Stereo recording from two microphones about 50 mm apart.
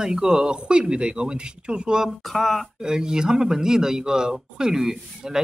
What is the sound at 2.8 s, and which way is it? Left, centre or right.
Speech, centre.